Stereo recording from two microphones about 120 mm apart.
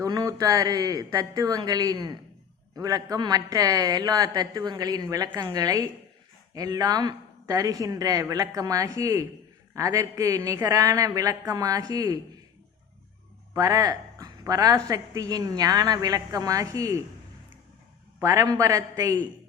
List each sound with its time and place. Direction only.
0.0 s a woman's voice: 30° right (ahead or behind)
13.6 s a woman's voice: 30° right (ahead or behind)
18.2 s a woman's voice: 30° right (ahead or behind)